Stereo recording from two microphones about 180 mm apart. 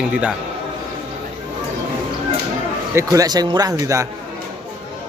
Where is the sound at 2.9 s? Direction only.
20° right (ahead or behind).